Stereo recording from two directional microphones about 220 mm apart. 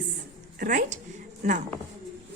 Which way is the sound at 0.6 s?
35° right (ahead or behind).